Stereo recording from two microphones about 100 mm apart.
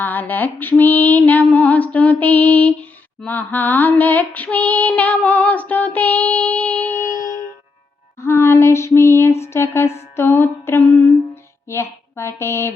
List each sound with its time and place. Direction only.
0.0 s mantra: 20° left (ahead or behind)
3.2 s female singing: 15° left (ahead or behind)
8.2 s a sound: 25° left (ahead or behind)